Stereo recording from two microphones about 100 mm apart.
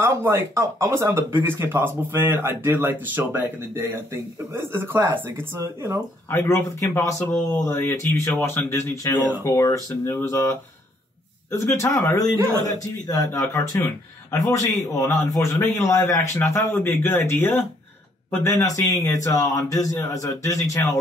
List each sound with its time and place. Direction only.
0.2 s speech: 25° right (ahead or behind)
6.3 s speech: 20° left (ahead or behind)
13.3 s speech: 25° left (ahead or behind)